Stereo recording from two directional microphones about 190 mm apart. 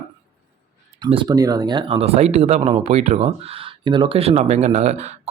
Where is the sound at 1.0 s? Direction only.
25° right (ahead or behind).